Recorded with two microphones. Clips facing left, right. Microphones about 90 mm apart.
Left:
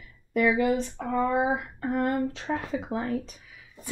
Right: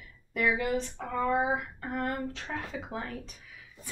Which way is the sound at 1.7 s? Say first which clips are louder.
Left 7 dB; 20° left (ahead or behind).